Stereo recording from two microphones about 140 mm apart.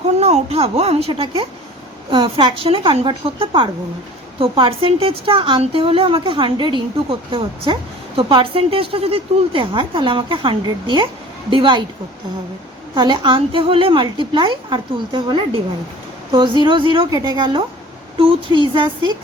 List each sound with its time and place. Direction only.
0.2 s a woman's voice: 50° right (ahead or behind)
12.9 s a woman's voice: 35° right (ahead or behind)
16.6 s a woman's voice: 35° right (ahead or behind)